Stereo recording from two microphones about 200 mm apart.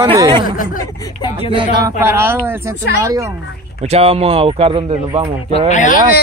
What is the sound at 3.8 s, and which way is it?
Speech, 30° right (ahead or behind).